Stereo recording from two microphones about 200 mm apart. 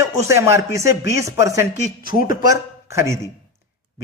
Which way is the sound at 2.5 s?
15° right (ahead or behind).